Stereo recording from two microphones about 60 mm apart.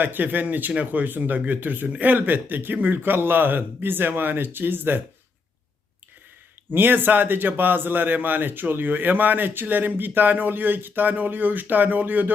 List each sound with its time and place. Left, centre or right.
0.0 s a man's voice: right
6.7 s a man's voice: right